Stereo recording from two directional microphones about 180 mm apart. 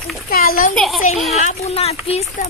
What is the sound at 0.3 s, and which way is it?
Speech, 55° left (ahead or behind).